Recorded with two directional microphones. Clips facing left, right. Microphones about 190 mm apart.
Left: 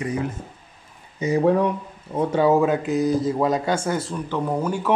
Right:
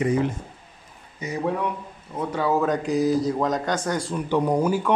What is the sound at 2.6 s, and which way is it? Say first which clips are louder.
Speech: left 1 dB; 5° left (ahead or behind).